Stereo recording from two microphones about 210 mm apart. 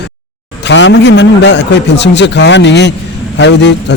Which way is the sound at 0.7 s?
60° left (ahead or behind).